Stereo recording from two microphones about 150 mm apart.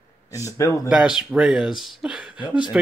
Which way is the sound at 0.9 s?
5° right (ahead or behind).